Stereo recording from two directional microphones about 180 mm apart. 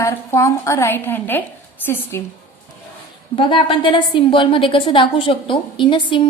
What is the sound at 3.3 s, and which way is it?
A woman's voice, 30° left (ahead or behind).